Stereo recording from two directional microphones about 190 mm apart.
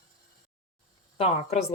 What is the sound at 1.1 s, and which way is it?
Speech, 30° left (ahead or behind).